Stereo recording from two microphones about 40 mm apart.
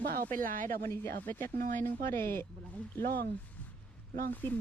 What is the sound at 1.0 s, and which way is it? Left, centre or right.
Speech, left.